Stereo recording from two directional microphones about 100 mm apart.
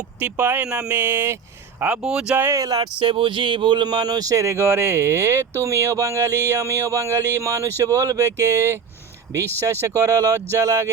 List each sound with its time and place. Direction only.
0.2 s speech: 20° right (ahead or behind)
2.0 s speech: 5° right (ahead or behind)
2.3 s speech: 25° right (ahead or behind)
2.6 s speech: 40° right (ahead or behind)
3.0 s speech: 60° right (ahead or behind); by 8.8 s 30° right (ahead or behind)
9.8 s speech: 35° right (ahead or behind)